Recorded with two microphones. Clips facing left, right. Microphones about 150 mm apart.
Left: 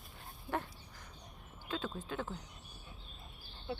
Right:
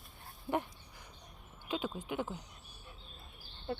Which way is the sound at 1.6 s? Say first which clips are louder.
Right 3 dB; 15° right (ahead or behind).